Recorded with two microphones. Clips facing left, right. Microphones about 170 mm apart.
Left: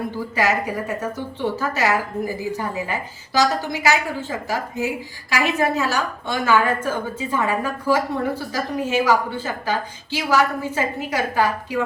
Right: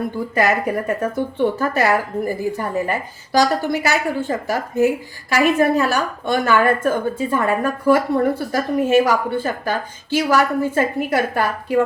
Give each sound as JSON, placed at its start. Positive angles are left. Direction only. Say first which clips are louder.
{"t": 0.3, "sound": "a woman's voice", "louder": "right 3 dB", "side_deg": -50}